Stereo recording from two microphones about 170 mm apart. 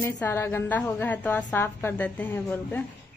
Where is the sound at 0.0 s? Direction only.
15° left (ahead or behind).